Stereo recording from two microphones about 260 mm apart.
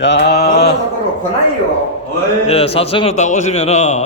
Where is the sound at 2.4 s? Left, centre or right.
Left.